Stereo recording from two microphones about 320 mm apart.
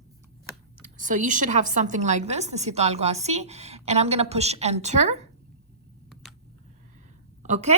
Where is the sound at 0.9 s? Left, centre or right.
Right.